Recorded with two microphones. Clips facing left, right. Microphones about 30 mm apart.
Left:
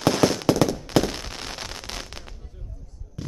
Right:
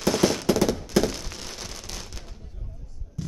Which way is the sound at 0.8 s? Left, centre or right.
Left.